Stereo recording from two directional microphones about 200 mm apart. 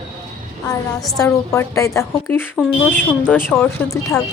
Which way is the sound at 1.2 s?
15° left (ahead or behind).